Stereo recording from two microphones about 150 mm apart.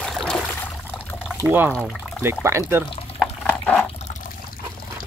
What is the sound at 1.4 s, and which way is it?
Speech, 15° right (ahead or behind).